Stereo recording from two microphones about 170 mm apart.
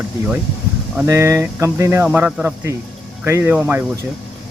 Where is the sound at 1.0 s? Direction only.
15° right (ahead or behind).